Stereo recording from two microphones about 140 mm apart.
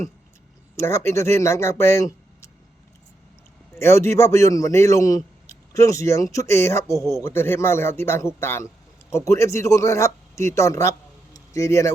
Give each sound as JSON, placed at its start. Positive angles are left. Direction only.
{"t": 0.8, "sound": "a man's voice", "side_deg": 20}
{"t": 3.8, "sound": "a man's voice", "side_deg": 20}